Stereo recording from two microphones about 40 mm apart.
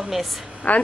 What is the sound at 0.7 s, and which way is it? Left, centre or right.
Speech, left.